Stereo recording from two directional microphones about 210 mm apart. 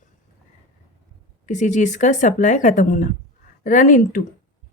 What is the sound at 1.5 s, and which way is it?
A woman's voice, 35° left (ahead or behind).